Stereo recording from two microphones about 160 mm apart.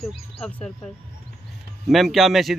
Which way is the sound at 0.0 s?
5° left (ahead or behind).